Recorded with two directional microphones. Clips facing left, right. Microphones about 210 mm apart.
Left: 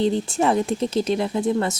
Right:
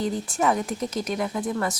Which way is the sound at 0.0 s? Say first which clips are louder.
Left 4 dB; 25° left (ahead or behind).